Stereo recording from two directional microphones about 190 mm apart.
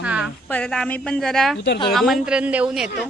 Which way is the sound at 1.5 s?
60° left (ahead or behind).